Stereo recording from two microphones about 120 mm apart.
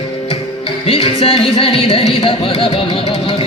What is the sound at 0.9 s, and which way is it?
Music, 50° left (ahead or behind).